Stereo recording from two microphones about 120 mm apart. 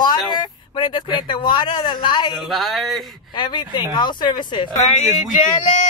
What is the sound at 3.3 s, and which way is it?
Speech, 40° left (ahead or behind).